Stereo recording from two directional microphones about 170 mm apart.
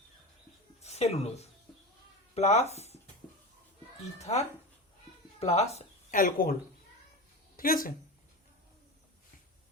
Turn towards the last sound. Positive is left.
turn(degrees=55)  # may be behind; listen again after turning